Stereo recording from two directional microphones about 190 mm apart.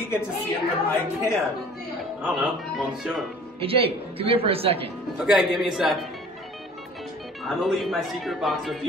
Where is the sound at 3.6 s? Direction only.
30° right (ahead or behind).